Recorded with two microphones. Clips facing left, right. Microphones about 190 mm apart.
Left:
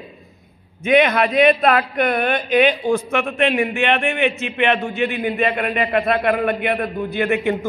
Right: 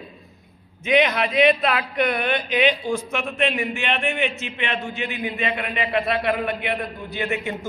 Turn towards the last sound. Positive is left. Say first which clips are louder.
# left 7 dB
turn(degrees=60)  # may be behind; listen again after turning